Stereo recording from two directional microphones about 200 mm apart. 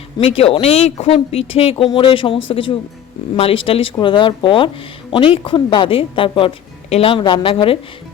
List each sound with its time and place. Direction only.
0.2 s speech: 30° left (ahead or behind)